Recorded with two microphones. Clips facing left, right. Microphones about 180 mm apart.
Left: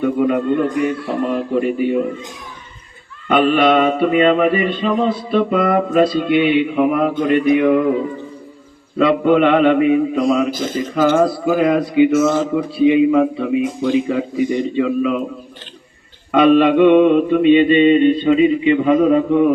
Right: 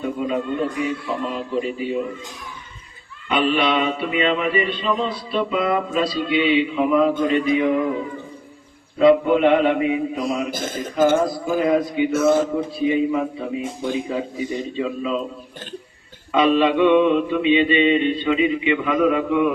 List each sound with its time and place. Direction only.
0.0 s a man's voice: 65° left (ahead or behind)
3.2 s mantra: 45° left (ahead or behind)
7.3 s a man's voice: 60° left (ahead or behind)
9.0 s a man's voice: 70° left (ahead or behind)
10.8 s a man's voice: 75° left (ahead or behind)
11.1 s a man's voice: 60° left (ahead or behind)
12.1 s speech: 60° right (ahead or behind)
12.7 s a man's voice: 70° left (ahead or behind)
16.3 s mantra: 55° left (ahead or behind); by 19.5 s 35° left (ahead or behind)